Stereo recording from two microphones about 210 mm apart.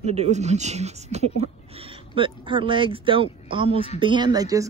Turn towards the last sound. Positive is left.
turn(degrees=-15)  # may be behind; listen again after turning